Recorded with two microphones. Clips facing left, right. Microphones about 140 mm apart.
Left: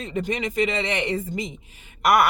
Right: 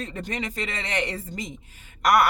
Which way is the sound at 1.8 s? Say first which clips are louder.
Left 1 dB; 10° left (ahead or behind).